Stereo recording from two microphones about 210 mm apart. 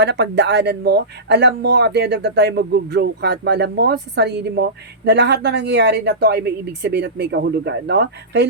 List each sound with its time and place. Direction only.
0.0 s speech: 55° right (ahead or behind)